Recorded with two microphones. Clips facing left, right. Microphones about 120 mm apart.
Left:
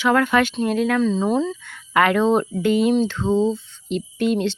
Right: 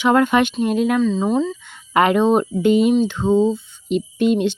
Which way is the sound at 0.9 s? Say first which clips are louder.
Right 1 dB; centre (ahead or behind).